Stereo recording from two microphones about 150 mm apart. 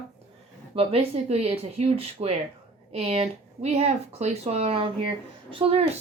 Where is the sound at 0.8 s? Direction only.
40° right (ahead or behind).